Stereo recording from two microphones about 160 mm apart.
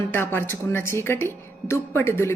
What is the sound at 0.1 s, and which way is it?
A woman's voice, 15° left (ahead or behind).